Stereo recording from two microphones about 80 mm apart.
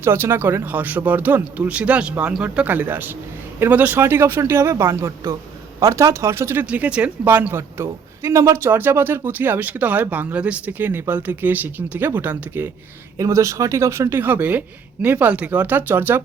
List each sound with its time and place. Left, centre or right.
0.0 s speech: right
6.7 s speech: centre
7.8 s speech: right
13.1 s speech: right
14.2 s speech: right